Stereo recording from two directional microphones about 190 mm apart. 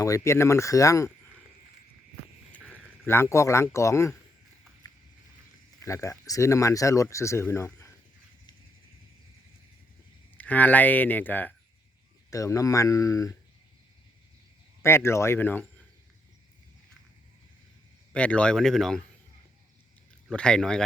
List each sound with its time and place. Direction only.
0.0 s speech: 15° left (ahead or behind)
2.6 s a sound: 5° right (ahead or behind)
3.1 s speech: 15° left (ahead or behind)
5.8 s speech: 15° left (ahead or behind)
10.3 s speech: 10° left (ahead or behind)
14.8 s speech: 15° left (ahead or behind)
18.1 s speech: 5° left (ahead or behind)
20.2 s speech: 5° left (ahead or behind)